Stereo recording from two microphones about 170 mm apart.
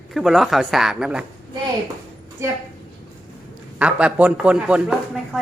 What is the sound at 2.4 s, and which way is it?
Speech, 15° right (ahead or behind).